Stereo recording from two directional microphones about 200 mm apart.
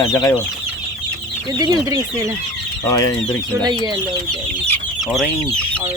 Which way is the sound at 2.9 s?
20° left (ahead or behind).